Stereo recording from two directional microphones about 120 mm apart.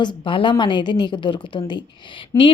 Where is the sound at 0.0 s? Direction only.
40° left (ahead or behind).